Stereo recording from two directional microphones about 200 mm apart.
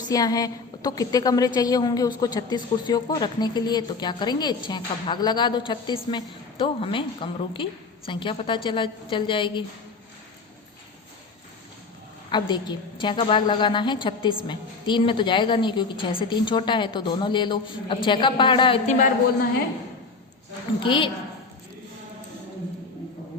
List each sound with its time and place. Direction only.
0.1 s a woman's voice: 20° left (ahead or behind)
12.3 s a woman's voice: 20° left (ahead or behind)
20.7 s a woman's voice: 25° left (ahead or behind)